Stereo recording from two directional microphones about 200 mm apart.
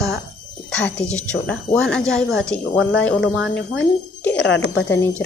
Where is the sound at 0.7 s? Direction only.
5° left (ahead or behind).